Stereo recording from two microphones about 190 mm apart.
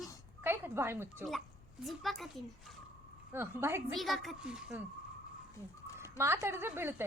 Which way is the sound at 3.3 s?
10° right (ahead or behind).